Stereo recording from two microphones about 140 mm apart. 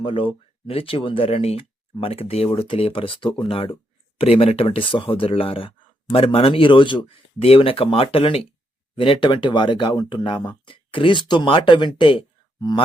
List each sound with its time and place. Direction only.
0.0 s speech: 40° left (ahead or behind)